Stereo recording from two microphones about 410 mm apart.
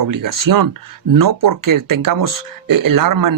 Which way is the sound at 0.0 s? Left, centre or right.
Right.